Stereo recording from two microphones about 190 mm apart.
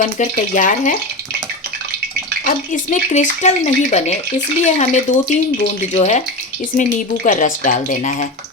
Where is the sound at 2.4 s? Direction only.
45° left (ahead or behind).